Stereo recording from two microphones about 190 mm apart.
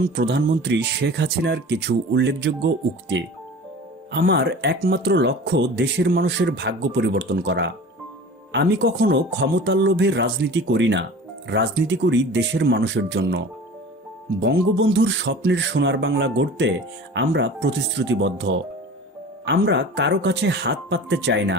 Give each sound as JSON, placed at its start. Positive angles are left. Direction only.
{"t": 0.2, "sound": "speech", "side_deg": -65}
{"t": 4.1, "sound": "speech", "side_deg": -60}
{"t": 14.4, "sound": "speech", "side_deg": -60}
{"t": 19.5, "sound": "speech", "side_deg": -60}